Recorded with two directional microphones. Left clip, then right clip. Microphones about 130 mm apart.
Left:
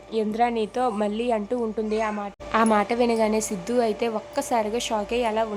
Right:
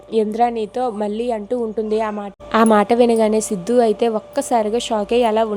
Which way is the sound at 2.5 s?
55° right (ahead or behind).